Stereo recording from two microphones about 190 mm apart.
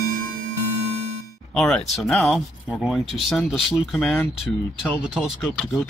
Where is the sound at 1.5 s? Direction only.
Centre (ahead or behind).